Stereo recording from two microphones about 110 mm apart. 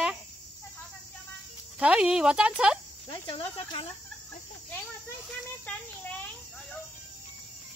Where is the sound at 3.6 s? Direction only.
55° left (ahead or behind).